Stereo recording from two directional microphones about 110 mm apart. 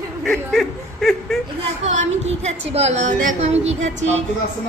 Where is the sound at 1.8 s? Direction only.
90° right.